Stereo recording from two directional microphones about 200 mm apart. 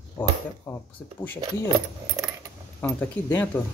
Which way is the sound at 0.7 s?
15° left (ahead or behind).